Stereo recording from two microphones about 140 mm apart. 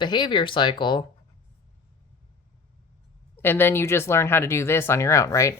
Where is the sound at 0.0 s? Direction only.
35° left (ahead or behind).